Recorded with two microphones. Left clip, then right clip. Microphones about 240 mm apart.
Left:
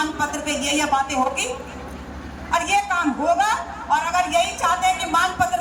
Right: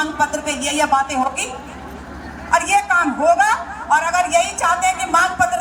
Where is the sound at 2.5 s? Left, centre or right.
Centre.